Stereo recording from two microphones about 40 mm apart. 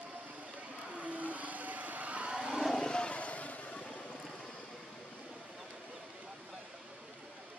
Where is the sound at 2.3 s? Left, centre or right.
Right.